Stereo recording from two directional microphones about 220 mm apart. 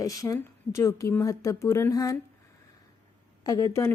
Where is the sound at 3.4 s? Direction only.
15° left (ahead or behind).